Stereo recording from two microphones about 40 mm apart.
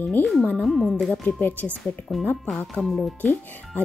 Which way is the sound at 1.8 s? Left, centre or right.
Centre.